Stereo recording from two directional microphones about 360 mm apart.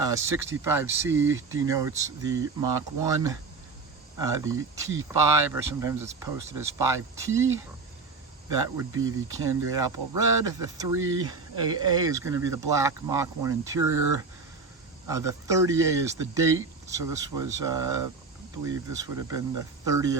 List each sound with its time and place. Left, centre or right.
0.0 s speech: centre
9.0 s speech: centre